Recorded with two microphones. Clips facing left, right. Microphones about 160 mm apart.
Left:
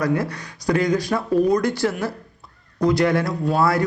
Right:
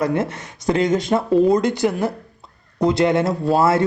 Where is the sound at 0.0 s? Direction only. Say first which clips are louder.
Right 1 dB; 25° right (ahead or behind).